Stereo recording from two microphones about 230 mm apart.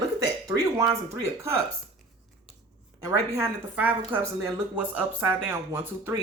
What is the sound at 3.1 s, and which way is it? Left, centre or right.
Speech, centre.